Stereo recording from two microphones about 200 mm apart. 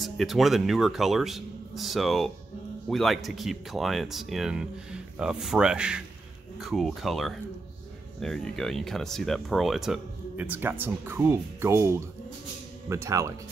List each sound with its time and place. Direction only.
0.0 s speech: centre (ahead or behind)